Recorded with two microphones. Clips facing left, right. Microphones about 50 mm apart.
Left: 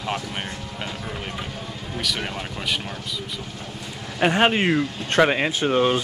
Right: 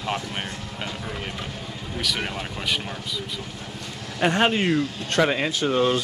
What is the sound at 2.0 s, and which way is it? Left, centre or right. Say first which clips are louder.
Speech: even; centre.